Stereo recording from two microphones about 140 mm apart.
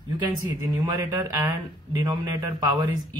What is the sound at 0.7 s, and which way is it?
A man's voice, 25° right (ahead or behind).